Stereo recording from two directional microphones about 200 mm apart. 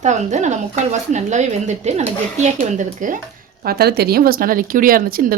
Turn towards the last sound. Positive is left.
turn(degrees=-45)  # may be behind; listen again after turning